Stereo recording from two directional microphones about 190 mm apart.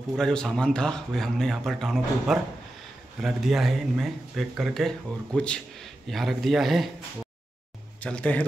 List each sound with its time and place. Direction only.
0.2 s speech: 5° left (ahead or behind)
8.0 s speech: 5° left (ahead or behind)